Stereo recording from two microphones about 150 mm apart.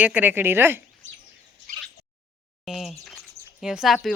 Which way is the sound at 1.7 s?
70° right (ahead or behind).